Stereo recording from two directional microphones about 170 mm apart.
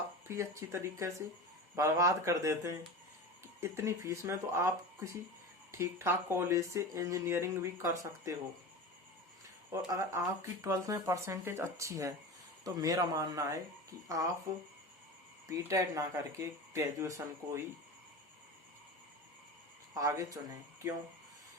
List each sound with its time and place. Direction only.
0.3 s speech: 15° right (ahead or behind)
9.9 s speech: 15° right (ahead or behind)
15.4 s speech: 20° right (ahead or behind)
19.9 s speech: 20° right (ahead or behind)